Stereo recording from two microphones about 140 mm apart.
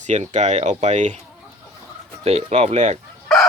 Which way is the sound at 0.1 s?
55° right (ahead or behind).